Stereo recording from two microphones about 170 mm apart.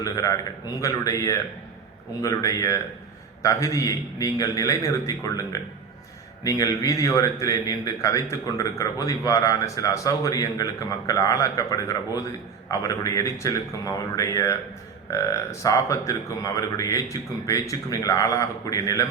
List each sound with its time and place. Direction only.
0.0 s a man's voice: 20° left (ahead or behind)